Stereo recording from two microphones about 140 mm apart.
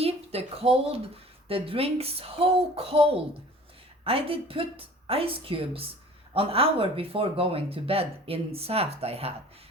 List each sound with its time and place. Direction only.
0.0 s a woman's voice: 45° right (ahead or behind)